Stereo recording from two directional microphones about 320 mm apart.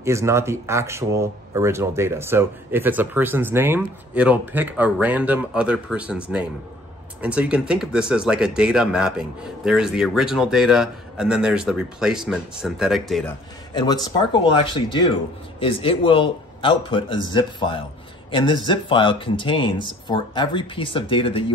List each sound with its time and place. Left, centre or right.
0.0 s a man's voice: centre
14.0 s speech: centre